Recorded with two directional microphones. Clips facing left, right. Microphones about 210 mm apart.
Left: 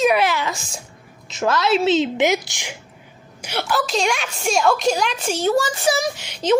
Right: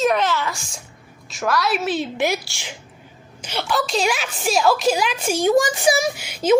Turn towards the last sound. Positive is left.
turn(degrees=-10)  # may be behind; listen again after turning